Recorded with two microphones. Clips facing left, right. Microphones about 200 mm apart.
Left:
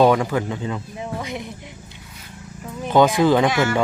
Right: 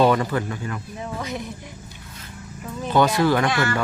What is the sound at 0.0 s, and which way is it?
Speech, 10° left (ahead or behind).